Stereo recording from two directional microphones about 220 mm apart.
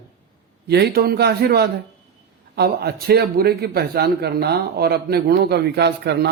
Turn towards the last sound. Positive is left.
turn(degrees=-50)  # may be behind; listen again after turning